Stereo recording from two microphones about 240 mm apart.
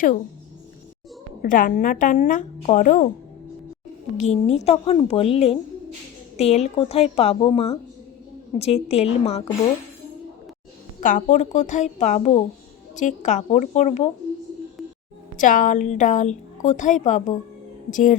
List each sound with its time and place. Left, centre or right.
1.4 s a woman's voice: left
4.2 s a woman's voice: left
11.0 s a woman's voice: left
15.4 s a woman's voice: left